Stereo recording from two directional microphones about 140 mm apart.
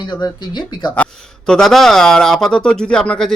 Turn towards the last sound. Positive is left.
turn(degrees=5)  # may be behind; listen again after turning